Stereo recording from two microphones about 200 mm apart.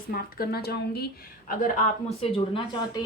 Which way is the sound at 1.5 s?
40° left (ahead or behind).